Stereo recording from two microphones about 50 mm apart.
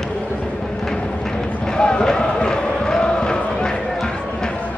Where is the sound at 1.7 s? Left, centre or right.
Centre.